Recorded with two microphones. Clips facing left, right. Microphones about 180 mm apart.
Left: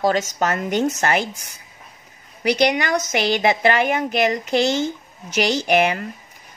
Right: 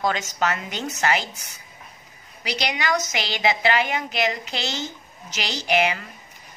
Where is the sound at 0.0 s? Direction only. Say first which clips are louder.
Left 4 dB; 40° left (ahead or behind).